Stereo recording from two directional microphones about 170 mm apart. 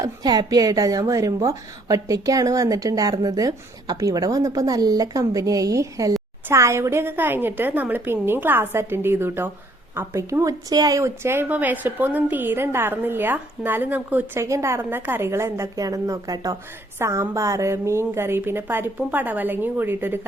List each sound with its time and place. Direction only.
0.0 s a woman's voice: 25° right (ahead or behind)